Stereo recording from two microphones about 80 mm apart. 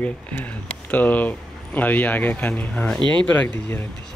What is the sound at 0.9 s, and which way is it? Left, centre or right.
Speech, left.